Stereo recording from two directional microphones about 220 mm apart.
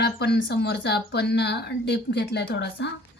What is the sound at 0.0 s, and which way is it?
Speech, 50° left (ahead or behind).